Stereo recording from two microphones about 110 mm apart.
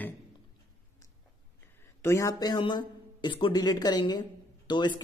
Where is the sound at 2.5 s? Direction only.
45° left (ahead or behind).